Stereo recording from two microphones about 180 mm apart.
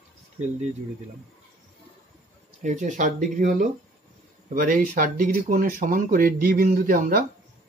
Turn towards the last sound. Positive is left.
turn(degrees=-50)  # may be behind; listen again after turning